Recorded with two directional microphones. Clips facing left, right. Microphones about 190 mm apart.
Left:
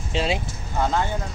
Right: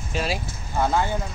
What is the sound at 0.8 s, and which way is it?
Speech, 10° right (ahead or behind).